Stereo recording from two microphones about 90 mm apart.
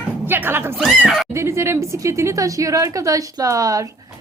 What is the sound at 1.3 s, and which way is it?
A woman's voice, 30° right (ahead or behind).